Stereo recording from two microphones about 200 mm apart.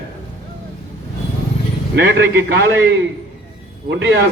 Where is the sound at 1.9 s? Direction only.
55° right (ahead or behind).